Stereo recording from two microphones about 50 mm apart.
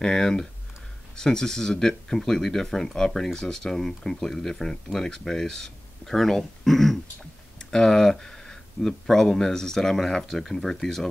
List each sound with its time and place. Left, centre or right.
0.0 s speech: centre